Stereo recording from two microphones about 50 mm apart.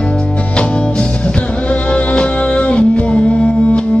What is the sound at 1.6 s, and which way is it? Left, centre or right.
Music, left.